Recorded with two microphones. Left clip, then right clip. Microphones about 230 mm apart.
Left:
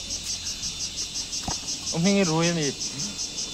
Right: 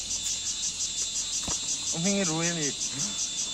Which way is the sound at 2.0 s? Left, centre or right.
Left.